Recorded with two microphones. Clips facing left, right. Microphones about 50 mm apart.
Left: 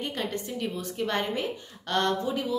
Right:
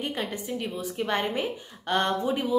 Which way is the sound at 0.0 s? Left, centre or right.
Centre.